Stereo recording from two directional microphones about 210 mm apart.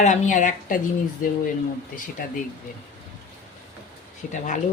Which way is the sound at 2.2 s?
40° left (ahead or behind).